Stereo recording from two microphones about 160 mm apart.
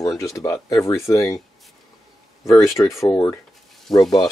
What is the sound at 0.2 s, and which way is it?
Speech, 20° left (ahead or behind).